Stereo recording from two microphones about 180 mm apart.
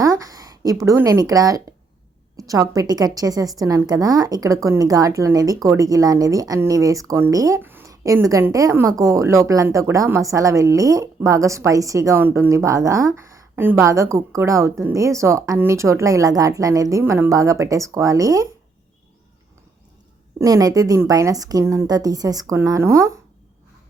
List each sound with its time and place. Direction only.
0.0 s a woman's voice: 20° right (ahead or behind)
20.4 s a woman's voice: 20° right (ahead or behind)